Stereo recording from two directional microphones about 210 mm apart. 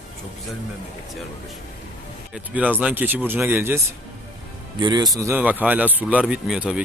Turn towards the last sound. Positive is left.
turn(degrees=-5)  # may be behind; listen again after turning